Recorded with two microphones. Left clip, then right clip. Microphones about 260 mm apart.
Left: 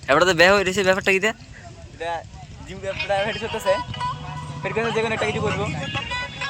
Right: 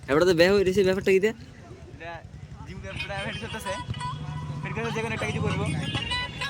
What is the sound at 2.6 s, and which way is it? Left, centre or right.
Speech, left.